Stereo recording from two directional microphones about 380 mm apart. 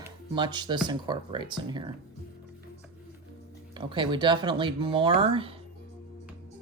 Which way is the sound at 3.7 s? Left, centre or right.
Centre.